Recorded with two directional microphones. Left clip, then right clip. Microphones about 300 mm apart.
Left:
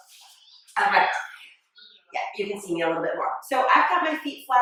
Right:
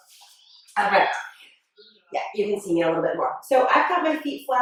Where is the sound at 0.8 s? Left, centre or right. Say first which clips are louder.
Even; centre.